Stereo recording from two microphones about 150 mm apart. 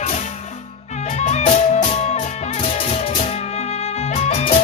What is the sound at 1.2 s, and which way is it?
Music, 50° left (ahead or behind).